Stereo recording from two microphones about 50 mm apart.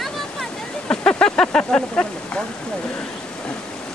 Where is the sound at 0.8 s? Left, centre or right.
Centre.